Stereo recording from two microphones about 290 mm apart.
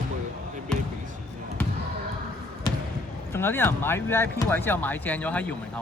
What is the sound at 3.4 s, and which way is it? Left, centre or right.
Speech, centre.